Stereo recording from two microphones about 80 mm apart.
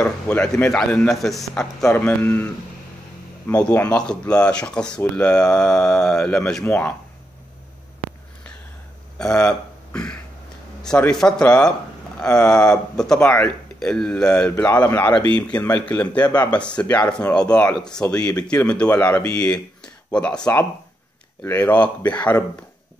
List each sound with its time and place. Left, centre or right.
0.0 s speech: centre
2.0 s speech: left
3.6 s speech: centre
6.6 s speech: left
9.2 s a sound: centre
11.1 s speech: centre
14.6 s speech: left
16.1 s speech: left